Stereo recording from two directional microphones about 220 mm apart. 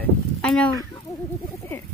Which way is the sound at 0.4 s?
5° left (ahead or behind).